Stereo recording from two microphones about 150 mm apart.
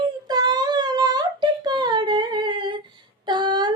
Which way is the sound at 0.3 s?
25° right (ahead or behind).